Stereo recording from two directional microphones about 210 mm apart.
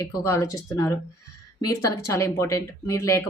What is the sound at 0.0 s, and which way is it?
Speech, 15° left (ahead or behind).